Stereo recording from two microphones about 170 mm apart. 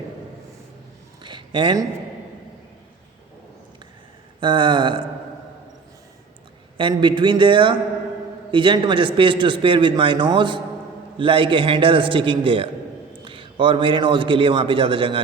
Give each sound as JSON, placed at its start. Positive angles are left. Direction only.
{"t": 1.2, "sound": "speech", "side_deg": -30}
{"t": 4.4, "sound": "a man's voice", "side_deg": -30}
{"t": 6.7, "sound": "a man's voice", "side_deg": -30}